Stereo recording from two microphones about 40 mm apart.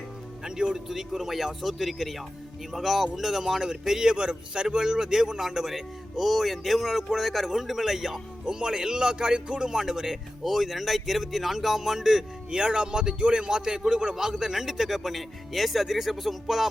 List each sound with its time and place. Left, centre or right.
0.4 s music: centre
0.9 s a man's voice: centre